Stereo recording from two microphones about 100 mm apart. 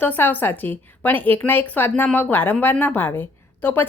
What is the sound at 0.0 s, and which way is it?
A woman's voice, 20° left (ahead or behind).